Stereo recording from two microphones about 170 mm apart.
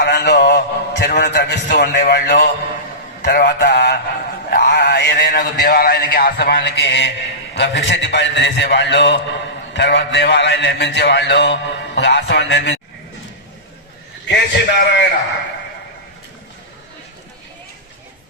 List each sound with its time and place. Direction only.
0.0 s a man's voice: 75° left (ahead or behind)
4.4 s mantra: 70° left (ahead or behind); by 7.1 s 90° left
7.5 s a man's voice: 90° left
14.3 s a man's voice: 90° left